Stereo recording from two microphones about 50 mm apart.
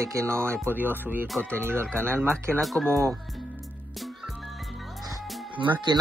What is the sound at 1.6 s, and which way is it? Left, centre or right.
Speech, right.